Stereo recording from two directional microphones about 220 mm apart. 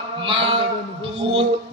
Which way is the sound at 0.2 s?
25° right (ahead or behind).